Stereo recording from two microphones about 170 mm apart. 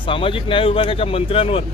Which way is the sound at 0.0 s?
30° left (ahead or behind).